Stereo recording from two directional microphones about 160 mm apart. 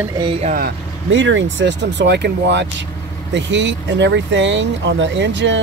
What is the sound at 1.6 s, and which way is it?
Speech, 90° right.